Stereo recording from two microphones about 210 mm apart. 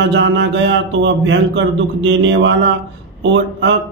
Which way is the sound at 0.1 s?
60° right (ahead or behind).